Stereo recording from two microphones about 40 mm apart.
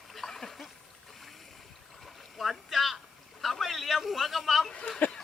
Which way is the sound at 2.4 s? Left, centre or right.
Centre.